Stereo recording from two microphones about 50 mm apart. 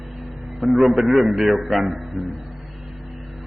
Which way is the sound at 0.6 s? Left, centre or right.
Centre.